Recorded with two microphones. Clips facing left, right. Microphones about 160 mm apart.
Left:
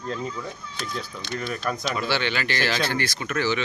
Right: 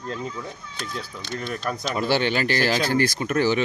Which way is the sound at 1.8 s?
45° right (ahead or behind).